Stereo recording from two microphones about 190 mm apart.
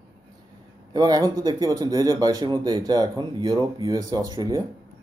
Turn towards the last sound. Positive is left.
turn(degrees=-20)  # may be behind; listen again after turning